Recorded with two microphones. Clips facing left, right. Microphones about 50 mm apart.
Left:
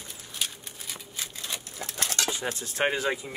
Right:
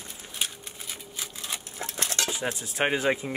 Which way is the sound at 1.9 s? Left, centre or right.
Right.